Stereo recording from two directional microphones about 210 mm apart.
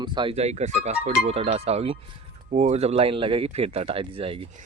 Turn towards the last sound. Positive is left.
turn(degrees=-25)  # may be behind; listen again after turning